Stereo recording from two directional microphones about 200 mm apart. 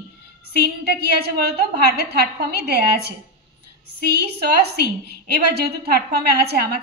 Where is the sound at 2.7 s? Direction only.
55° right (ahead or behind).